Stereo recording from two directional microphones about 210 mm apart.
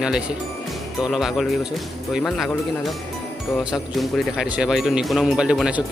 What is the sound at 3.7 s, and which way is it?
Speech, centre (ahead or behind).